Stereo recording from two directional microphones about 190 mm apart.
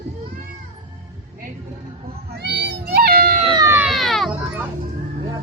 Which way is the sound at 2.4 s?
60° right (ahead or behind).